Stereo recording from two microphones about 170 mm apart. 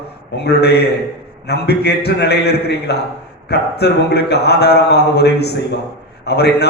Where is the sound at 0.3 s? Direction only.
75° left (ahead or behind).